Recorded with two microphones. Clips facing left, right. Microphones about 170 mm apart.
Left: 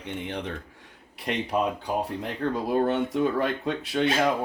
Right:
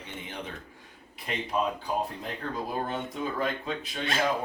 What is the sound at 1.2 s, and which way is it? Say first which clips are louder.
Speech: left 5 dB; 70° left (ahead or behind).